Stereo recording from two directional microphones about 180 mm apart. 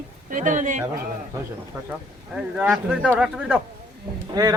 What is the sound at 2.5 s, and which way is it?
Speech, 5° right (ahead or behind).